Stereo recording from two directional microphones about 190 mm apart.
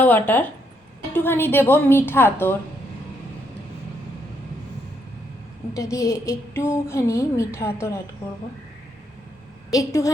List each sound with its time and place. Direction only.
0.0 s a woman's voice: 10° left (ahead or behind)
5.7 s a woman's voice: 15° left (ahead or behind)
9.7 s a woman's voice: 15° left (ahead or behind)